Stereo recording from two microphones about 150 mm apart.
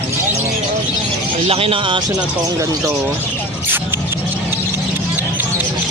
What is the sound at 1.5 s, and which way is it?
Speech, 40° right (ahead or behind).